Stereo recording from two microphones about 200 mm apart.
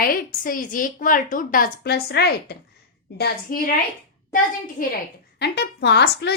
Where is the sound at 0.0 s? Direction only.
45° left (ahead or behind).